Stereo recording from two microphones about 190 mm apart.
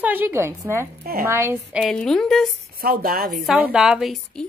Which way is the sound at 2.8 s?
50° right (ahead or behind).